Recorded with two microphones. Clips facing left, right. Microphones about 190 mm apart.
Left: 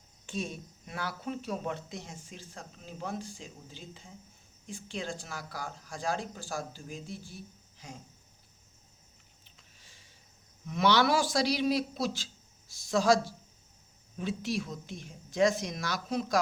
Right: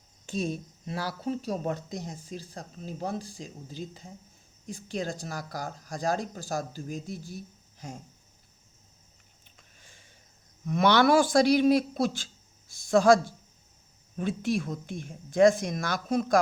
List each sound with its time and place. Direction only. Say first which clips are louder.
0.3 s speech: right 6 dB; 35° right (ahead or behind)
9.6 s a sound: right 4 dB; 50° right (ahead or behind)
10.7 s speech: right 4 dB; 50° right (ahead or behind)